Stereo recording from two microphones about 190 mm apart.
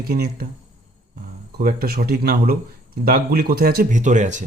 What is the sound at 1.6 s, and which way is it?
Speech, 55° right (ahead or behind).